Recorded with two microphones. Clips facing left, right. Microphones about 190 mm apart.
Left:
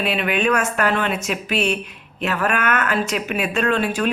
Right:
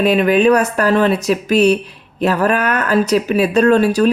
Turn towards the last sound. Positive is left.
turn(degrees=-40)  # may be behind; listen again after turning